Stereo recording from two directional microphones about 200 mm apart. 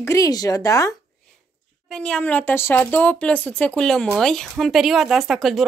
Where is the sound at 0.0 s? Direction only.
15° left (ahead or behind).